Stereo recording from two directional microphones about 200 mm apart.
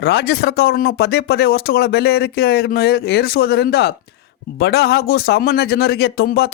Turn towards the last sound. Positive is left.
turn(degrees=55)  # may be behind; listen again after turning